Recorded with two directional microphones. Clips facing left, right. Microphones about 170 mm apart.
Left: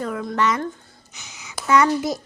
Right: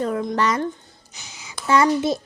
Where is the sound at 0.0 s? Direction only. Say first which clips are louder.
Right 1 dB; 30° right (ahead or behind).